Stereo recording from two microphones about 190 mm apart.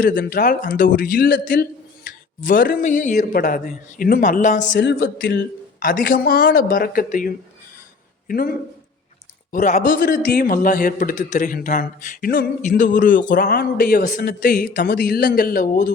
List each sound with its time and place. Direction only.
0.0 s a man's voice: 45° left (ahead or behind)
4.8 s a man's voice: 60° left (ahead or behind)